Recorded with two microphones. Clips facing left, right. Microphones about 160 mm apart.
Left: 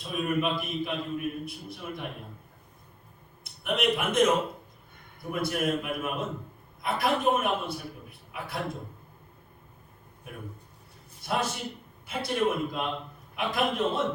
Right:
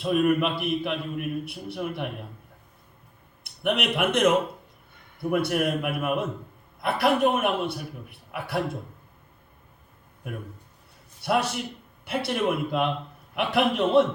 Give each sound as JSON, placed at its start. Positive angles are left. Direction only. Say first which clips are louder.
{"t": 0.0, "sound": "a man's voice", "louder": "right 6 dB", "side_deg": -65}
{"t": 3.4, "sound": "a man's voice", "louder": "right 1 dB", "side_deg": -70}
{"t": 5.3, "sound": "a man's voice", "louder": "right 4 dB", "side_deg": -65}
{"t": 11.2, "sound": "a man's voice", "louder": "right 5 dB", "side_deg": -70}